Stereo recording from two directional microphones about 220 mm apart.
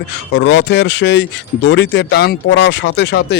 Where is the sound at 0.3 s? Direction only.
55° left (ahead or behind).